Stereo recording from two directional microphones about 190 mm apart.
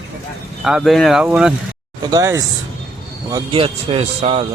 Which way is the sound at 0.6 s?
Centre (ahead or behind).